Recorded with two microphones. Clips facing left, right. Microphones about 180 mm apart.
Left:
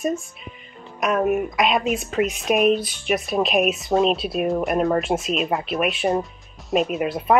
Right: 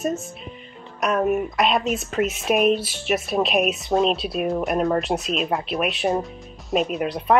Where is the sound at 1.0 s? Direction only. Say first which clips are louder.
Left 1 dB; centre (ahead or behind).